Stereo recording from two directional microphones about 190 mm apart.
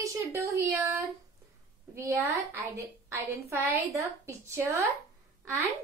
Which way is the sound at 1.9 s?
15° right (ahead or behind).